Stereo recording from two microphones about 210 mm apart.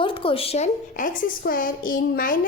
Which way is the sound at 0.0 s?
25° left (ahead or behind).